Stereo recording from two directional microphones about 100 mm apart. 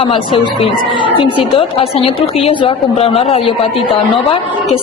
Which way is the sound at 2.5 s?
55° left (ahead or behind).